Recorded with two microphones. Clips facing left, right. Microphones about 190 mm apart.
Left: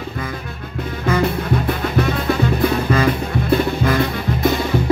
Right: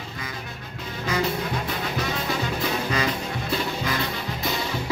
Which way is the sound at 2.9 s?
55° left (ahead or behind).